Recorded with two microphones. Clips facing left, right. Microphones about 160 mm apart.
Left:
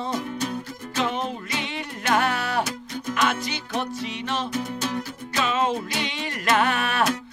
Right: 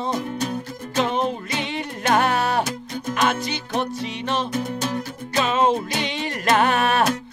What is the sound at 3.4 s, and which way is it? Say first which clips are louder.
Music: right 3 dB; 30° right (ahead or behind).